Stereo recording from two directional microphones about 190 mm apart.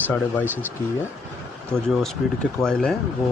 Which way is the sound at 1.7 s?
Centre (ahead or behind).